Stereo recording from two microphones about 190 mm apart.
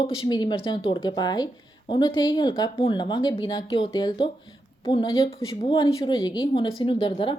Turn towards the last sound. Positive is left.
turn(degrees=25)  # may be behind; listen again after turning